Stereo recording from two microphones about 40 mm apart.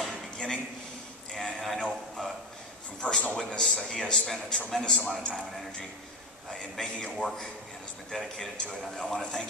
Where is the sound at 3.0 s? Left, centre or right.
Left.